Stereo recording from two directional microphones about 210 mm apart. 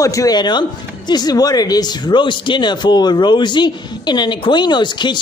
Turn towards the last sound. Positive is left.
turn(degrees=20)  # may be behind; listen again after turning